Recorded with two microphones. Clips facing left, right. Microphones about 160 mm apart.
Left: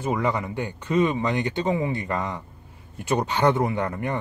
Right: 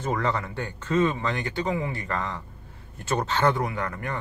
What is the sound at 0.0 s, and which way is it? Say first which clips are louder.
Speech: left 2 dB; 10° left (ahead or behind).